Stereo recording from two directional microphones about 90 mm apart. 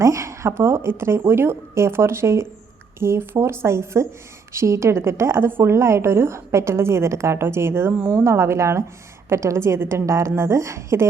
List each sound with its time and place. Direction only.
0.0 s a woman's voice: 35° right (ahead or behind)